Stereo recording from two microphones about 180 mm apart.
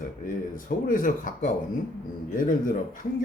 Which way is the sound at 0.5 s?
50° left (ahead or behind).